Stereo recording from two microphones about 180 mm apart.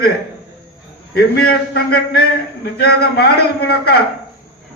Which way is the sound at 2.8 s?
65° left (ahead or behind).